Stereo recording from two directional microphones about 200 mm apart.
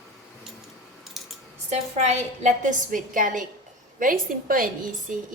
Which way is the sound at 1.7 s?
35° right (ahead or behind).